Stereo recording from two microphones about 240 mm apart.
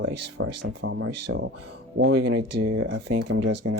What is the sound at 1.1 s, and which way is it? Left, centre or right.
Speech, right.